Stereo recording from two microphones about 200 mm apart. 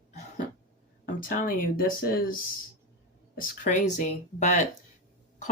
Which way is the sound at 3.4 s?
40° left (ahead or behind).